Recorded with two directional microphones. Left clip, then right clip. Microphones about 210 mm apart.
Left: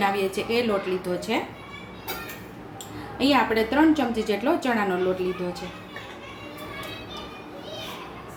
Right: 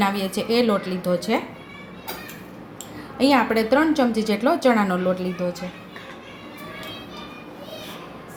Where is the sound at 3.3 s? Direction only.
35° right (ahead or behind).